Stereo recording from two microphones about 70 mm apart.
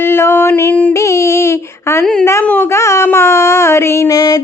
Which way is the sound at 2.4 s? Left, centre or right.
Left.